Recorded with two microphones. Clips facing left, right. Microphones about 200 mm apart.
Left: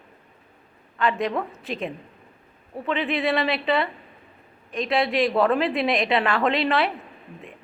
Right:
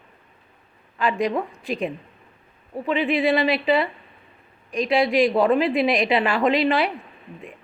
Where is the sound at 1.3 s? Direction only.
15° right (ahead or behind).